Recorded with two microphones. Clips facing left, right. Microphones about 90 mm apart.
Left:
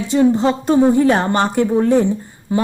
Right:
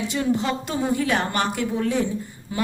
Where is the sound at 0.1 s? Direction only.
35° left (ahead or behind).